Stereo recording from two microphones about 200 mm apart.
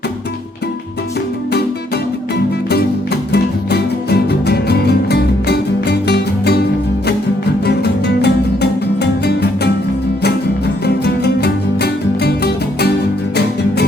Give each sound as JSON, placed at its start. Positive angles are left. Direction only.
{"t": 3.3, "sound": "music", "side_deg": 55}
{"t": 7.6, "sound": "music", "side_deg": 55}
{"t": 10.8, "sound": "music", "side_deg": 55}